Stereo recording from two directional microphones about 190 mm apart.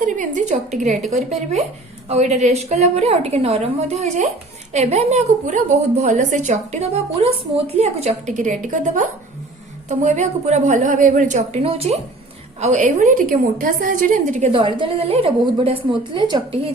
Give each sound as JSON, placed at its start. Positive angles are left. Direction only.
{"t": 0.0, "sound": "a woman's voice", "side_deg": -40}
{"t": 2.0, "sound": "a woman's voice", "side_deg": -35}
{"t": 14.5, "sound": "a woman's voice", "side_deg": -25}